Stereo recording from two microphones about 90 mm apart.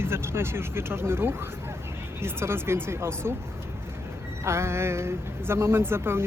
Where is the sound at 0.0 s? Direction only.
25° right (ahead or behind).